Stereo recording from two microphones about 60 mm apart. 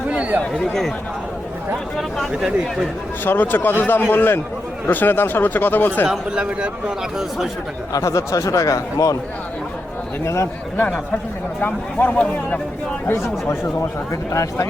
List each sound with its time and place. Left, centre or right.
0.1 s chatter: right
0.5 s speech: centre
3.2 s speech: left
6.1 s a man's voice: centre
7.9 s speech: left
10.2 s speech: left
11.6 s speech: left
13.1 s speech: left